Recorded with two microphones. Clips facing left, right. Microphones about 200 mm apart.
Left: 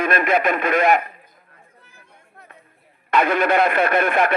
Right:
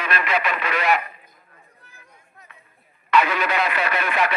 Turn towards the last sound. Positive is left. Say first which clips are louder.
# left 5 dB
turn(degrees=55)  # may be behind; listen again after turning